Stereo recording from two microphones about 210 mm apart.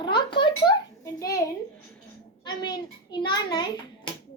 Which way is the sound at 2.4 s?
20° left (ahead or behind).